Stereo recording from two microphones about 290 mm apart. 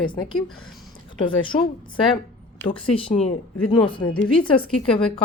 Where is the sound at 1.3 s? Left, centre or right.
Centre.